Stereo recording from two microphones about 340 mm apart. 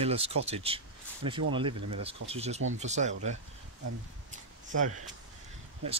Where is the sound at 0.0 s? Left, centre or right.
Centre.